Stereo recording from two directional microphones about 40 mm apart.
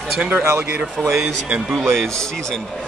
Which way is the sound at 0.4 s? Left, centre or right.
Right.